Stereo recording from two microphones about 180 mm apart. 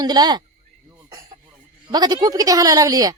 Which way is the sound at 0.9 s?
20° right (ahead or behind).